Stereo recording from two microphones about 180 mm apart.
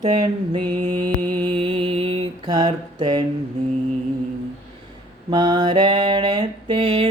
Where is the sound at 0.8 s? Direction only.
40° right (ahead or behind).